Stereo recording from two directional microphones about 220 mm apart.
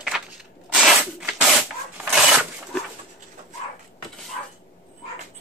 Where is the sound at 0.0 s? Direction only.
5° right (ahead or behind).